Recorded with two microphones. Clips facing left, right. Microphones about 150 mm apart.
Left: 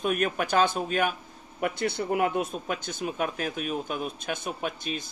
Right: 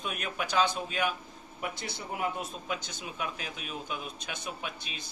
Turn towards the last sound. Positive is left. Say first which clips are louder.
# left 9 dB
turn(degrees=45)  # may be behind; listen again after turning